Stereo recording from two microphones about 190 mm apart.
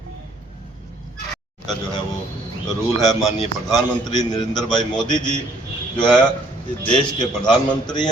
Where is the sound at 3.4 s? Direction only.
20° left (ahead or behind).